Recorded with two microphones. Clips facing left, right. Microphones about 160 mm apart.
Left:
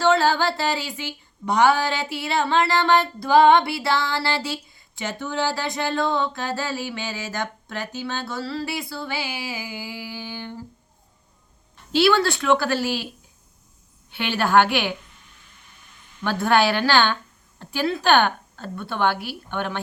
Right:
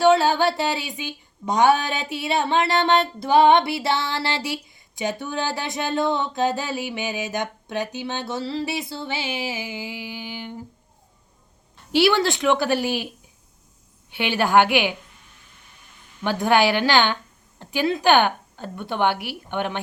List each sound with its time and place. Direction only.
0.0 s a sound: 15° right (ahead or behind)
11.9 s a woman's voice: 15° right (ahead or behind)
14.1 s a woman's voice: 15° right (ahead or behind)
16.2 s a woman's voice: 15° right (ahead or behind)